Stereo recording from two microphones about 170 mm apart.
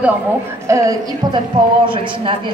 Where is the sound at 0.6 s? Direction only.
20° right (ahead or behind).